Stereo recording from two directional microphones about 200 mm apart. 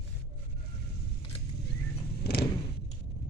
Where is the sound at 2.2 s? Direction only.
50° left (ahead or behind).